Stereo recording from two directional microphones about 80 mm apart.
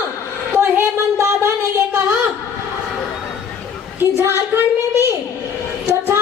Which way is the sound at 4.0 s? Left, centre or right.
Right.